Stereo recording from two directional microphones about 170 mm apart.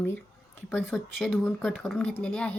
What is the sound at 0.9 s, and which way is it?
Speech, centre (ahead or behind).